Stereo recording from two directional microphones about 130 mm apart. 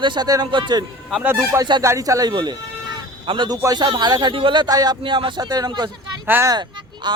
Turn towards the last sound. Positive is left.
turn(degrees=-35)  # may be behind; listen again after turning